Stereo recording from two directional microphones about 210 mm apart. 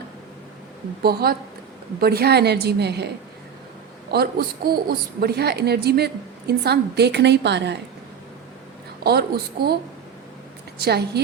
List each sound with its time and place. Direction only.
1.0 s a woman's voice: 45° right (ahead or behind)
4.1 s a woman's voice: 50° right (ahead or behind)
9.0 s a woman's voice: 50° right (ahead or behind)
10.8 s a woman's voice: 50° right (ahead or behind)